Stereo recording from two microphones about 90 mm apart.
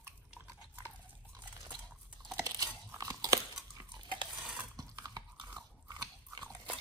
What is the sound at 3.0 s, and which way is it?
Crunch, 40° right (ahead or behind).